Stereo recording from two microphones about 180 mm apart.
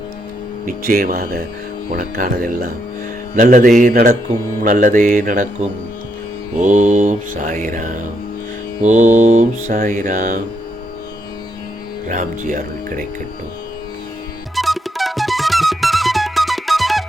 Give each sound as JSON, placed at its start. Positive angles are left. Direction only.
{"t": 0.9, "sound": "mantra", "side_deg": -55}
{"t": 6.6, "sound": "mantra", "side_deg": -45}
{"t": 12.0, "sound": "mantra", "side_deg": -45}
{"t": 14.5, "sound": "music", "side_deg": 0}